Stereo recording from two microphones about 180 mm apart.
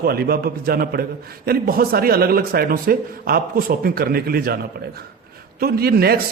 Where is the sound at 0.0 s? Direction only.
60° right (ahead or behind).